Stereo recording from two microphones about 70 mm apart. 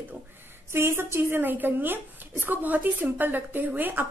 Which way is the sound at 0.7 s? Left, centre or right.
Right.